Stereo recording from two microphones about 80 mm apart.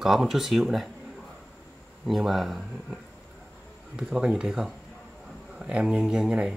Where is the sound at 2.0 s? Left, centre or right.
Centre.